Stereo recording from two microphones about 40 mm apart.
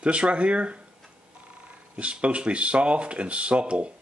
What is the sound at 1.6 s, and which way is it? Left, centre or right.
Speech, right.